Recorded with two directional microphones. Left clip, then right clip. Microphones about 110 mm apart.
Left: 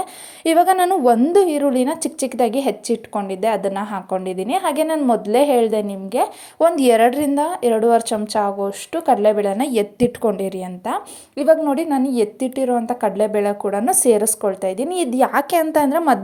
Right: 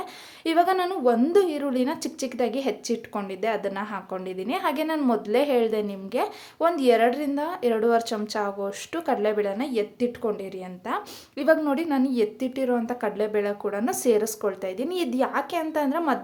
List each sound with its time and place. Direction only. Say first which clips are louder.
0.4 s speech: left 8 dB; 50° left (ahead or behind)
1.2 s speech: left 7 dB; 40° left (ahead or behind)
6.6 s speech: left 7 dB; 55° left (ahead or behind); by 9.5 s 35° left (ahead or behind)
9.5 s a woman's voice: left 8 dB; 65° left (ahead or behind)
10.8 s a woman's voice: left 5 dB; 25° left (ahead or behind)
15.3 s a woman's voice: left 10 dB; 70° left (ahead or behind)